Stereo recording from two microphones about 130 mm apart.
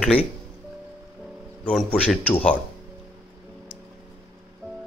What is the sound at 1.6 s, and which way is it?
Speech, 5° left (ahead or behind).